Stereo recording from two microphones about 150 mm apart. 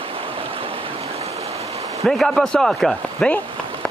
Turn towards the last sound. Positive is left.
turn(degrees=5)  # may be behind; listen again after turning